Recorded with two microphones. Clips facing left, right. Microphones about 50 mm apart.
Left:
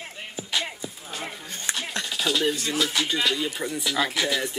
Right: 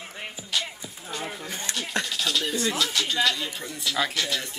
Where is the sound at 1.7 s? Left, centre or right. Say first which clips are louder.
Even; centre.